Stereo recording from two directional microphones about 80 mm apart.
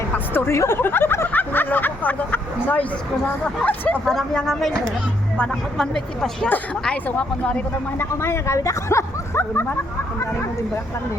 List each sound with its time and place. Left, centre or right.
0.3 s a sound: left
3.4 s speech: centre
4.0 s speech: centre
7.9 s speech: left